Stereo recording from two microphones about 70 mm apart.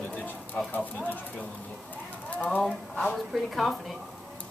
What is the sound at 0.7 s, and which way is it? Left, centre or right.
Speech, left.